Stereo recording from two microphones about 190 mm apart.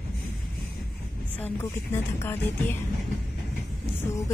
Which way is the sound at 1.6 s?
15° left (ahead or behind).